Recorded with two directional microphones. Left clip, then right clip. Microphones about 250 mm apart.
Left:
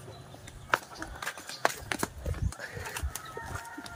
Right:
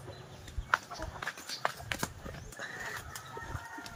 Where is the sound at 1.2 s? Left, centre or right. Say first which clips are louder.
Left 5 dB; left.